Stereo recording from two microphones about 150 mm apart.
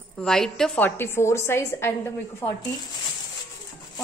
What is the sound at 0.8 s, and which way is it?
A woman's voice, 15° left (ahead or behind).